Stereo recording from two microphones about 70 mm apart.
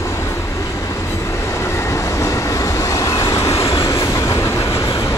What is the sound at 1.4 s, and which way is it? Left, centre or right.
Train, left.